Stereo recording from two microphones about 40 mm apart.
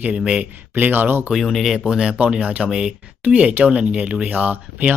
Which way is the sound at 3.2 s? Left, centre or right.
Right.